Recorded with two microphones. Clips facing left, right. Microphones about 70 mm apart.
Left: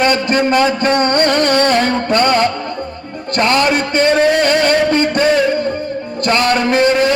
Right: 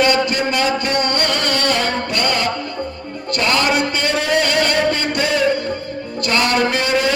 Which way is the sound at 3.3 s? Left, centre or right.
Left.